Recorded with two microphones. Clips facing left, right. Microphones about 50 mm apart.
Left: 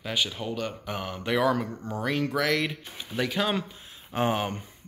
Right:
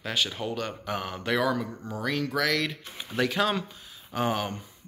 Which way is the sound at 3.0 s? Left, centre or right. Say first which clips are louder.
Right 2 dB; centre.